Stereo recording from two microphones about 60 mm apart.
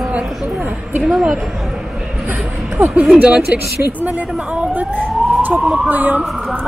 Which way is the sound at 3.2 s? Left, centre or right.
Right.